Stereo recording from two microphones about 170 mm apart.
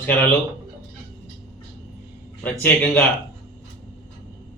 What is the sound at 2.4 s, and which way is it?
Speech, 10° left (ahead or behind).